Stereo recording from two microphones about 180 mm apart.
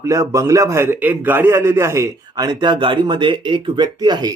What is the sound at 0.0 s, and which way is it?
A man's voice, 15° right (ahead or behind).